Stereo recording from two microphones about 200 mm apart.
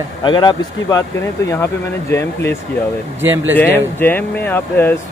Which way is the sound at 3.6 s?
10° left (ahead or behind).